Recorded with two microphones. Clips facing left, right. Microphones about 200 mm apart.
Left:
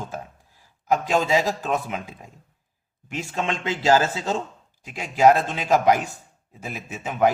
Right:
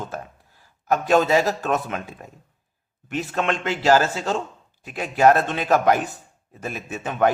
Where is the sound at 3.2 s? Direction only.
15° left (ahead or behind).